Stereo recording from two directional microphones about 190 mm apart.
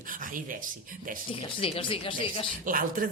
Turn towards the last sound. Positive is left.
turn(degrees=-45)  # may be behind; listen again after turning